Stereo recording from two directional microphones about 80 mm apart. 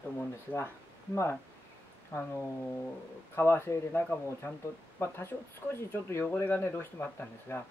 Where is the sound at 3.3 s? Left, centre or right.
Left.